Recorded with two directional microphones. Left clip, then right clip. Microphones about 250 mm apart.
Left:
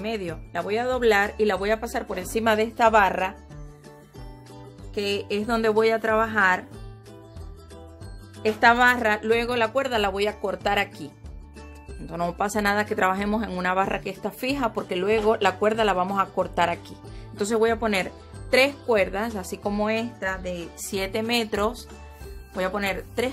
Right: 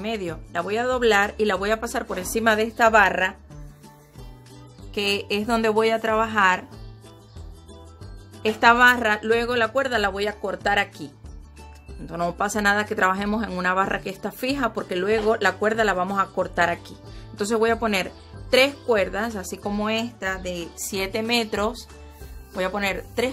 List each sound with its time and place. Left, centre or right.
0.0 s speech: centre
4.9 s speech: centre
8.4 s speech: centre
12.1 s speech: centre